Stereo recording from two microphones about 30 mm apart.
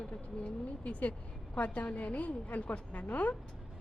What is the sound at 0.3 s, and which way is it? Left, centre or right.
Speech, left.